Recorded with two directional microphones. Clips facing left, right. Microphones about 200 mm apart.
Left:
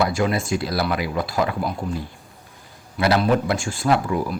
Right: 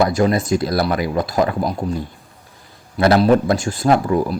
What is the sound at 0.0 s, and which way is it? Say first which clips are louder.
Speech: right 5 dB; 40° right (ahead or behind).